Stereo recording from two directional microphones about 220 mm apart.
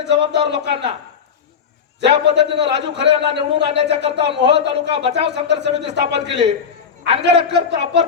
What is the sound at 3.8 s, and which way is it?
Speech, 25° right (ahead or behind).